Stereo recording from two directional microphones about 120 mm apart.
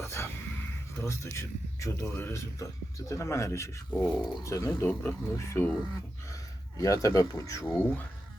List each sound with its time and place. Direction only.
0.0 s a sound: 20° left (ahead or behind)
0.9 s speech: 25° left (ahead or behind)
3.9 s speech: 5° left (ahead or behind)
4.4 s speech: 25° left (ahead or behind)
6.7 s speech: 25° left (ahead or behind)